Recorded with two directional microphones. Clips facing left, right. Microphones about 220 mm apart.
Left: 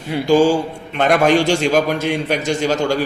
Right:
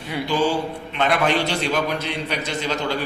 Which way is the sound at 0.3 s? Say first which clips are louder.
Left 9 dB; 45° left (ahead or behind).